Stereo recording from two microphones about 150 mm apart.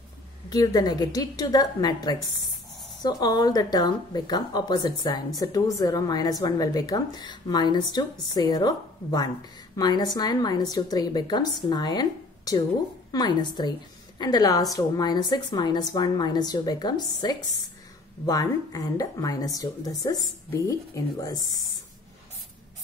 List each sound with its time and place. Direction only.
0.5 s a woman's voice: 25° left (ahead or behind)